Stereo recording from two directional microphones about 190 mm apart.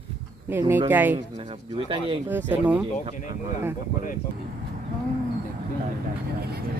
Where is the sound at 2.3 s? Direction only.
10° right (ahead or behind).